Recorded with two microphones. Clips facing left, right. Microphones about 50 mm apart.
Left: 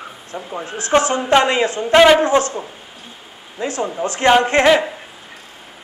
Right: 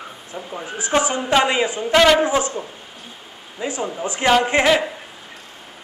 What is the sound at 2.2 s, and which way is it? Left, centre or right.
Speech, centre.